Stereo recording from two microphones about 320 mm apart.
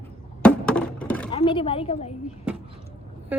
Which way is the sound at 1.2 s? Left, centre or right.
Centre.